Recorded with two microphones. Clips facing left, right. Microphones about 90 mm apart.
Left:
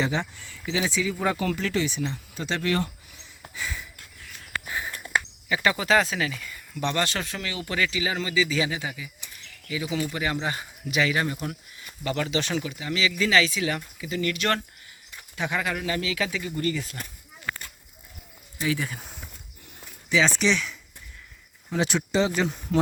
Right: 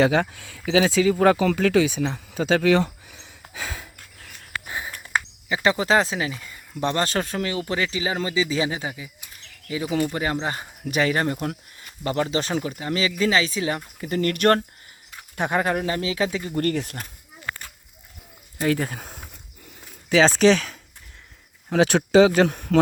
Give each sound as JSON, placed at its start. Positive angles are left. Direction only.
{"t": 0.0, "sound": "speech", "side_deg": -60}
{"t": 3.5, "sound": "a sound", "side_deg": -80}
{"t": 4.6, "sound": "a sound", "side_deg": -20}
{"t": 5.5, "sound": "speech", "side_deg": -25}
{"t": 10.8, "sound": "speech", "side_deg": -45}
{"t": 12.0, "sound": "speech", "side_deg": -35}
{"t": 14.0, "sound": "speech", "side_deg": -50}
{"t": 16.6, "sound": "speech", "side_deg": -60}
{"t": 18.6, "sound": "speech", "side_deg": -50}
{"t": 21.7, "sound": "speech", "side_deg": -60}